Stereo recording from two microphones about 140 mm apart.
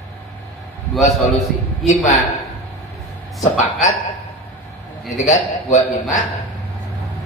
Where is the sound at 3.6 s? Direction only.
55° left (ahead or behind).